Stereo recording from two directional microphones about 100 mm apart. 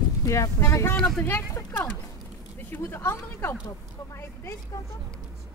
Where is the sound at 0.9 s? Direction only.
10° left (ahead or behind).